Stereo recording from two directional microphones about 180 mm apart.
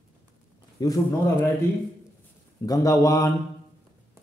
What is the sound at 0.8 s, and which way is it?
Speech, 20° left (ahead or behind).